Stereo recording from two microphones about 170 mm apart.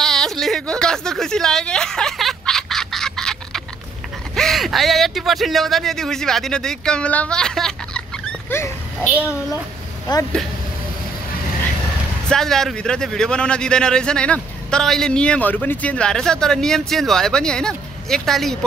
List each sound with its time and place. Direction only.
0.0 s a sound: centre (ahead or behind)
4.4 s speech: centre (ahead or behind)
9.0 s a child's voice: 10° right (ahead or behind)
10.1 s speech: 25° left (ahead or behind)
12.3 s speech: centre (ahead or behind)